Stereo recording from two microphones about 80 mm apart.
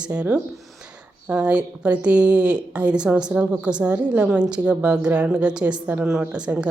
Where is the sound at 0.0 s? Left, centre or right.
Centre.